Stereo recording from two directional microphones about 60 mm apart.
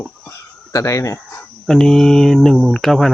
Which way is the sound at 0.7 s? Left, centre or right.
Left.